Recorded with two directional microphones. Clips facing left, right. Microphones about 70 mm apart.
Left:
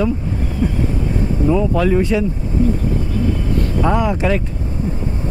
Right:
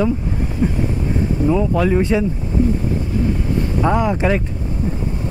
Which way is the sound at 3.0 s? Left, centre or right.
Right.